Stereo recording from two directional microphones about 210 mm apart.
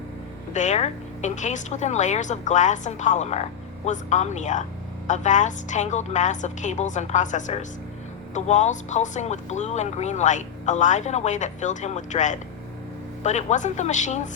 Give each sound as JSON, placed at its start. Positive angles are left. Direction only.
{"t": 0.5, "sound": "speech", "side_deg": 35}